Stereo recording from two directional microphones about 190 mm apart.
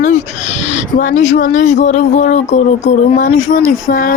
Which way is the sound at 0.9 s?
40° left (ahead or behind).